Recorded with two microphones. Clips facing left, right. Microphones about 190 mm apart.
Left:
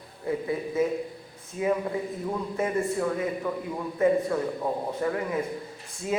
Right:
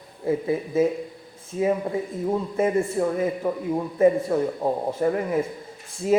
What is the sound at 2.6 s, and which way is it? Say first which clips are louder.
Speech: right 4 dB; 30° right (ahead or behind).